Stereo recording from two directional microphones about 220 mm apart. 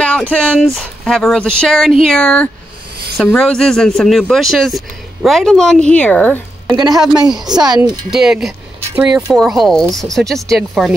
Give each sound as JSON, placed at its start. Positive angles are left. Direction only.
{"t": 0.0, "sound": "speech", "side_deg": 5}
{"t": 6.8, "sound": "a woman's voice", "side_deg": -15}
{"t": 8.1, "sound": "speech", "side_deg": 0}